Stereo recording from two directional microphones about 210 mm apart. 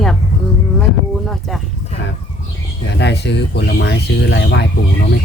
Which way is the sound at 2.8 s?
55° left (ahead or behind).